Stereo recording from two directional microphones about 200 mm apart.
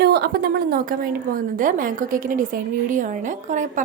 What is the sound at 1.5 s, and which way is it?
A woman's voice, 40° right (ahead or behind).